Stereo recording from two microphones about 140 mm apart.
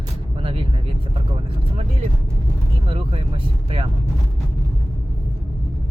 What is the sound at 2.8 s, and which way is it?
Speech, 45° right (ahead or behind).